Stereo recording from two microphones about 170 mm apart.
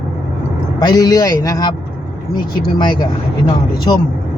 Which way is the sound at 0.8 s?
20° left (ahead or behind).